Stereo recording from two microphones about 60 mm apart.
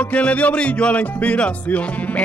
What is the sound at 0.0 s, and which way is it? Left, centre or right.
Music, left.